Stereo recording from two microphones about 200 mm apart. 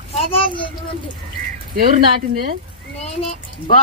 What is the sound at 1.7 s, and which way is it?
Speech, 50° right (ahead or behind).